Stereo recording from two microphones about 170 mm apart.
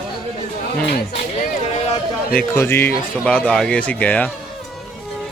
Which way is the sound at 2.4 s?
15° left (ahead or behind).